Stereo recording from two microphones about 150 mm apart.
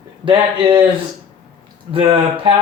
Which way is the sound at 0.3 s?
35° right (ahead or behind).